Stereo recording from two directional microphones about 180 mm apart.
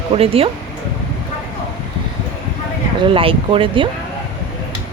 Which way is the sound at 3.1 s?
30° right (ahead or behind).